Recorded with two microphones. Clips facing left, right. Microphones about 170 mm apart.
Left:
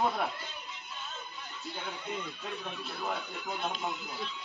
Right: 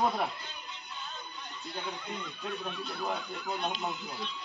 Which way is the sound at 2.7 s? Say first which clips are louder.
Even; 5° left (ahead or behind).